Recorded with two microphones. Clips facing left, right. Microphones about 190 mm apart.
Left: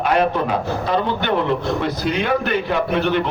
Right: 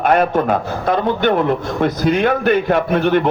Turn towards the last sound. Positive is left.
turn(degrees=-50)  # may be behind; listen again after turning